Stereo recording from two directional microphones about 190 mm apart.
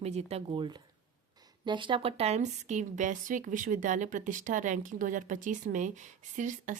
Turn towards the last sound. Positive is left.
turn(degrees=-40)  # may be behind; listen again after turning